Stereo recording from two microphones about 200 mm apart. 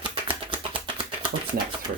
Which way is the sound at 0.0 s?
25° right (ahead or behind).